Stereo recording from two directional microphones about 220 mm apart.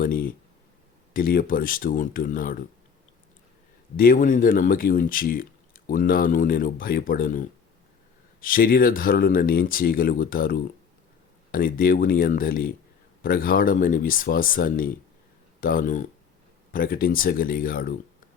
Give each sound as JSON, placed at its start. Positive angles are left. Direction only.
{"t": 0.0, "sound": "speech", "side_deg": 40}
{"t": 3.9, "sound": "speech", "side_deg": 40}